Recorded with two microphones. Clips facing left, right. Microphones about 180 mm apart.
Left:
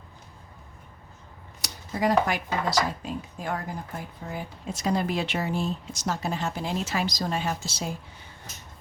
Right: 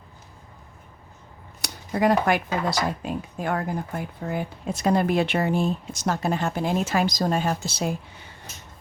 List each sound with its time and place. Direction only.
1.6 s speech: 60° right (ahead or behind)